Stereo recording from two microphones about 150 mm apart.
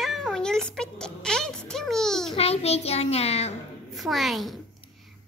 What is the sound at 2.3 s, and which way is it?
A child's voice, 45° left (ahead or behind).